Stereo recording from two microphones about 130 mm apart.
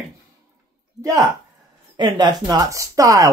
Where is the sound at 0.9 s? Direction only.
25° right (ahead or behind).